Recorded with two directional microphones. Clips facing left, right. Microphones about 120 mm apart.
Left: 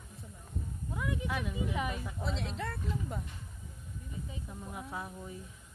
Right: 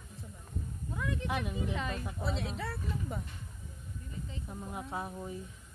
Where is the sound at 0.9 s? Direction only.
10° left (ahead or behind).